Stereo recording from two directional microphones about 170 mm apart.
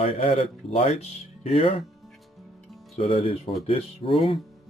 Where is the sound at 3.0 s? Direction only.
35° left (ahead or behind).